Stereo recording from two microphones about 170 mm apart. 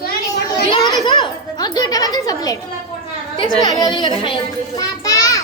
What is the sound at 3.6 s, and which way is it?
Speech, 25° left (ahead or behind).